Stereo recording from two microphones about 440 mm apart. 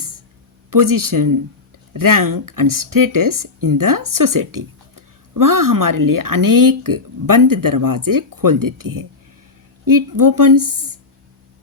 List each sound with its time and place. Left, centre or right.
0.7 s speech: right